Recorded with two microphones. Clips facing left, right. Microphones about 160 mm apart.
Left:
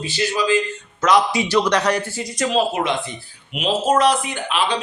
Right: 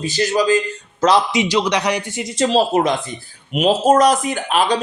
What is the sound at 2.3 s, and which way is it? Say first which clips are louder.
Speech: right 4 dB; 30° right (ahead or behind).